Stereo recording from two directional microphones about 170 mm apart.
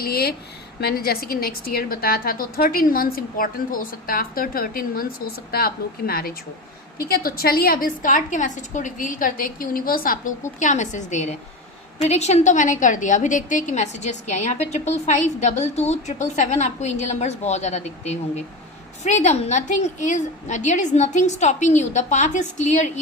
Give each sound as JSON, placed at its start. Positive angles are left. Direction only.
{"t": 0.0, "sound": "a woman's voice", "side_deg": 65}
{"t": 10.6, "sound": "a woman's voice", "side_deg": 45}